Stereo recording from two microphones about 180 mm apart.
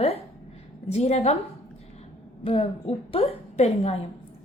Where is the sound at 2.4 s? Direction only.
30° left (ahead or behind).